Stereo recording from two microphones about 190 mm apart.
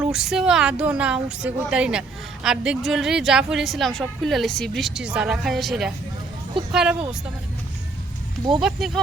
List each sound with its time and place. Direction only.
0.0 s a woman's voice: 5° right (ahead or behind)
8.6 s a woman's voice: centre (ahead or behind)